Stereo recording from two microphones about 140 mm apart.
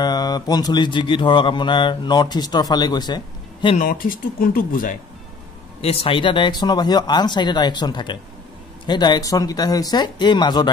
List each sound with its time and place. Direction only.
0.0 s mantra: 30° left (ahead or behind)
3.7 s speech: 80° left
5.8 s mantra: 45° left (ahead or behind)